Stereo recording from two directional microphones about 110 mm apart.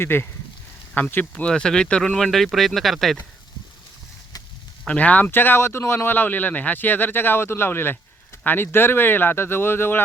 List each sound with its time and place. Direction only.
0.0 s speech: 20° left (ahead or behind); by 3.2 s centre (ahead or behind)
4.9 s speech: 15° left (ahead or behind)